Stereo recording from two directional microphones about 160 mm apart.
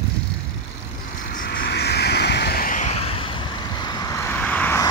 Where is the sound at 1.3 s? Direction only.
75° left (ahead or behind); by 4.8 s 10° left (ahead or behind).